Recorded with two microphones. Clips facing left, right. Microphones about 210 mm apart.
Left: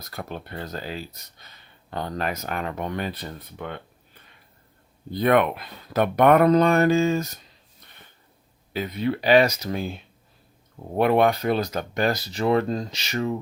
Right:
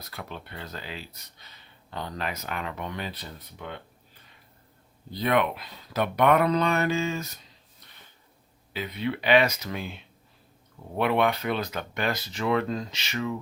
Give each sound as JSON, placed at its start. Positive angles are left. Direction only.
{"t": 0.0, "sound": "speech", "side_deg": 45}
{"t": 5.1, "sound": "speech", "side_deg": 50}
{"t": 8.7, "sound": "speech", "side_deg": 45}